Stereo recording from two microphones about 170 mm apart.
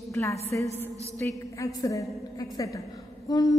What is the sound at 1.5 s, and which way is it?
A woman's voice, 20° left (ahead or behind).